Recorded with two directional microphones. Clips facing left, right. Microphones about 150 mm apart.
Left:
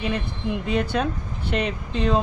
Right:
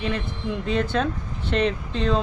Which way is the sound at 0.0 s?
10° left (ahead or behind).